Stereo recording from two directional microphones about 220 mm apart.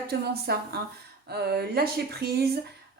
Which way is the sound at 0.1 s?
45° right (ahead or behind).